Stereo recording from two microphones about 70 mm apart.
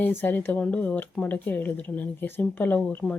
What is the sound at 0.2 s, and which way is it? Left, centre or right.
Speech, left.